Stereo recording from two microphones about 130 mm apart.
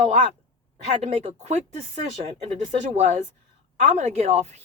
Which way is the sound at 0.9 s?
55° right (ahead or behind).